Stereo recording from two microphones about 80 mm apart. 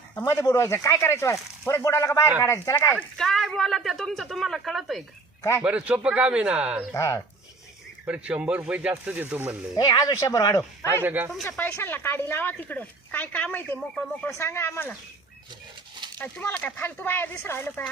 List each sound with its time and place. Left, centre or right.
0.3 s speech: left
3.2 s a woman's voice: centre
5.4 s speech: left
5.6 s speech: centre
6.9 s speech: left
8.0 s speech: centre
9.7 s speech: left
11.0 s speech: right
11.4 s a woman's voice: left
14.3 s speech: left
16.1 s a woman's voice: left